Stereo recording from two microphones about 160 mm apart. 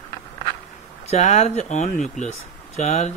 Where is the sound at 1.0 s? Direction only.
45° left (ahead or behind).